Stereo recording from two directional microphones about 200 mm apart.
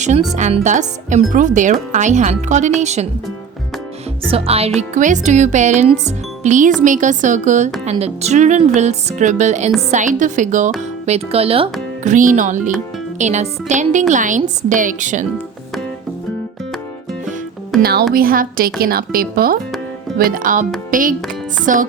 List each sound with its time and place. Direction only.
0.3 s speech: 35° right (ahead or behind)
4.3 s speech: 30° right (ahead or behind)
12.1 s speech: 40° right (ahead or behind)
17.7 s music: centre (ahead or behind)
18.1 s a woman's voice: 45° right (ahead or behind)